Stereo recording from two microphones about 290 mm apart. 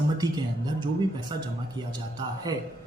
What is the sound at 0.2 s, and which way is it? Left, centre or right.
A man's voice, centre.